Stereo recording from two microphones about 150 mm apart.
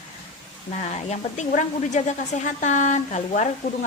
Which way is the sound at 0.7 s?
50° left (ahead or behind).